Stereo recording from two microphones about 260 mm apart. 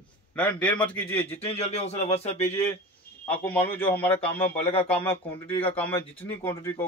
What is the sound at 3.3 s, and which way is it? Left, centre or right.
A man's voice, centre.